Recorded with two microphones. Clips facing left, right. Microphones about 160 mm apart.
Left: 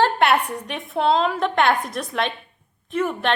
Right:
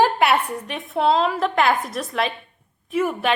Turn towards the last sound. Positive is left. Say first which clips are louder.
# right 1 dB
turn(degrees=-5)  # may be behind; listen again after turning